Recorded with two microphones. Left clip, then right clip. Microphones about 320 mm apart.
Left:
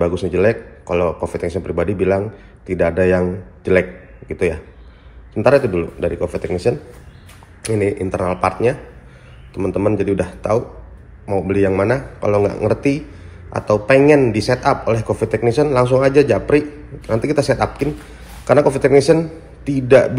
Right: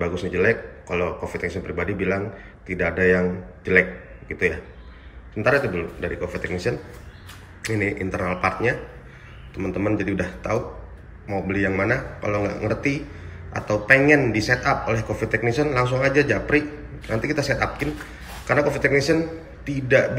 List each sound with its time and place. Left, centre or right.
0.0 s speech: centre
4.3 s speech: centre
6.7 s a man's voice: left
7.6 s speech: centre